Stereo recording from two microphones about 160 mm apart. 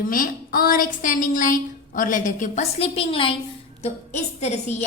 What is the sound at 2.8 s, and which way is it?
A woman's voice, 35° left (ahead or behind).